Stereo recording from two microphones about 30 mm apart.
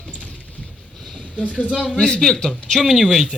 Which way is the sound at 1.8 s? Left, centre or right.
Left.